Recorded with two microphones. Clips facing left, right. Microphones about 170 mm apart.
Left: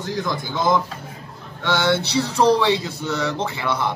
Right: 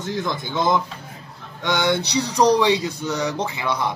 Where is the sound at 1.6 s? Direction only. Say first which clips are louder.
Left 1 dB; 15° right (ahead or behind).